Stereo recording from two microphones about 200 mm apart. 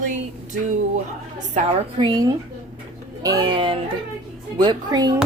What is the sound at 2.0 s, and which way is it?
A woman's voice, 25° right (ahead or behind).